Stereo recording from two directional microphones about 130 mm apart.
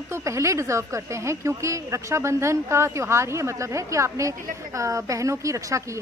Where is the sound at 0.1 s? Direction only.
20° right (ahead or behind).